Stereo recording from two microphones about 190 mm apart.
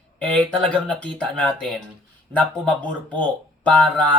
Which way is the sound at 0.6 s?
5° left (ahead or behind).